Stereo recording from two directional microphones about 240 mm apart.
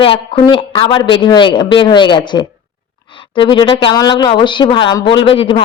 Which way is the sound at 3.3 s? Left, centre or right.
Left.